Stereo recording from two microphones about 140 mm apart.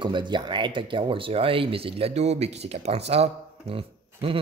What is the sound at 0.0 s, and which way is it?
Speech, 35° right (ahead or behind).